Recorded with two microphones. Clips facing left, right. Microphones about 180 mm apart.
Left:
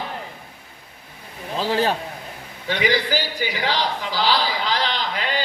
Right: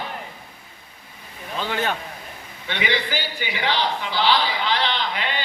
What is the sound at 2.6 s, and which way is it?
A man's voice, 40° left (ahead or behind).